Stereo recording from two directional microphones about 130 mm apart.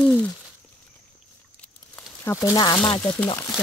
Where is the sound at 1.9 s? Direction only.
20° left (ahead or behind).